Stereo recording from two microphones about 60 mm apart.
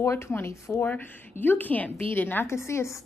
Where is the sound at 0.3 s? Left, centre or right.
Left.